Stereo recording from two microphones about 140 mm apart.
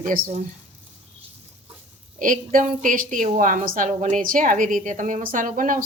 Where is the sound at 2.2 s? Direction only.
70° right (ahead or behind).